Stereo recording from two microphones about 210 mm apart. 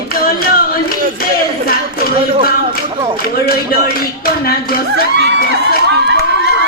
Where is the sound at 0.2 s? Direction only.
45° left (ahead or behind).